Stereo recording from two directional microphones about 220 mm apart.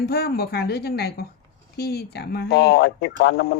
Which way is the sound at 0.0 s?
45° left (ahead or behind).